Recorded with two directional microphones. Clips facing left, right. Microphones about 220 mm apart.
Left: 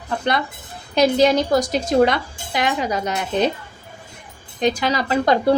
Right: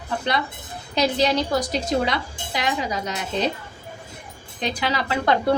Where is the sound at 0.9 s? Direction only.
50° left (ahead or behind).